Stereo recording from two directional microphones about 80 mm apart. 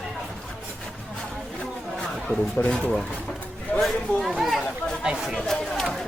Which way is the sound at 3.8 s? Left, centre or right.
Centre.